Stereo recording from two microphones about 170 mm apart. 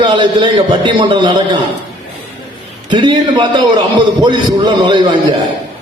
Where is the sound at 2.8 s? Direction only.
30° right (ahead or behind).